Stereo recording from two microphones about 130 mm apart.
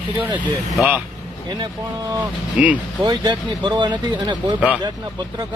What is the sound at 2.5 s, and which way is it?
Speech, 10° right (ahead or behind).